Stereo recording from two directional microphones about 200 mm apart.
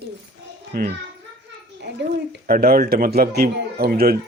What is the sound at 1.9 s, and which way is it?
Speech, 55° right (ahead or behind).